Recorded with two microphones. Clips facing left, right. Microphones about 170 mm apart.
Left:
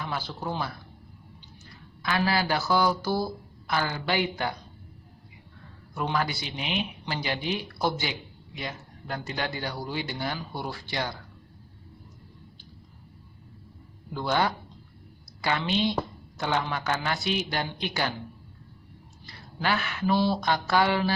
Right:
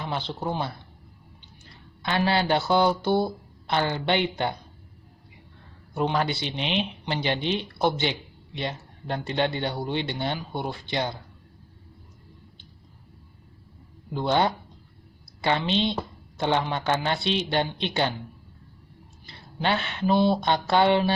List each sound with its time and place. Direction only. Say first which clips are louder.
0.0 s speech: right 3 dB; 25° right (ahead or behind)
2.0 s speech: right 2 dB; 25° right (ahead or behind)
5.9 s speech: right 4 dB; 25° right (ahead or behind)
14.1 s speech: right 3 dB; 25° right (ahead or behind)
19.3 s speech: right 2 dB; 25° right (ahead or behind)